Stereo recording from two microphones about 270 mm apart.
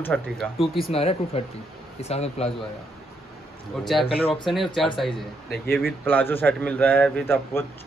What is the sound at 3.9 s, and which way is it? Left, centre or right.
Speech, centre.